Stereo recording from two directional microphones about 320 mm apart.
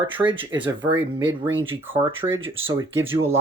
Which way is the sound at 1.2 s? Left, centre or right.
Right.